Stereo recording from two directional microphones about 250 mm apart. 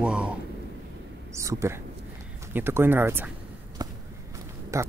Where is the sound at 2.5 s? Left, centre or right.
Centre.